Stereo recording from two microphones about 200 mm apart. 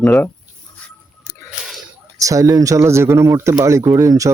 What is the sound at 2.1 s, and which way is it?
Speech, 15° right (ahead or behind).